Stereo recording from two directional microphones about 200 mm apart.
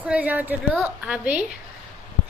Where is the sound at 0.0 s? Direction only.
5° right (ahead or behind).